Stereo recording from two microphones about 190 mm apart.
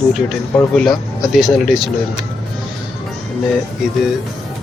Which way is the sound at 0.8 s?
Centre (ahead or behind).